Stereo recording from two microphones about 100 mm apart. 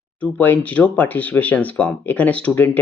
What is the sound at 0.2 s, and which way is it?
Speech, 15° left (ahead or behind).